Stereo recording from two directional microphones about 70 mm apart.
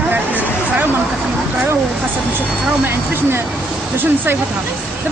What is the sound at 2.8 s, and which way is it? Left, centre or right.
Speech, right.